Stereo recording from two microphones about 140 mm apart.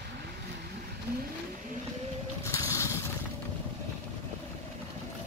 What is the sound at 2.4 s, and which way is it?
Boat, 20° left (ahead or behind).